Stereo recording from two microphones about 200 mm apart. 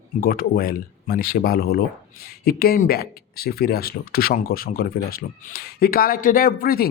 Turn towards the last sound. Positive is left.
turn(degrees=45)  # may be behind; listen again after turning